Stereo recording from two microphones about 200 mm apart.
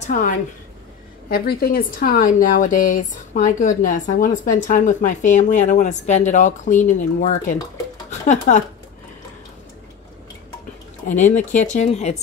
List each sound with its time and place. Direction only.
0.0 s a woman's voice: 40° left (ahead or behind)
1.3 s speech: 50° left (ahead or behind)
11.1 s speech: 40° left (ahead or behind)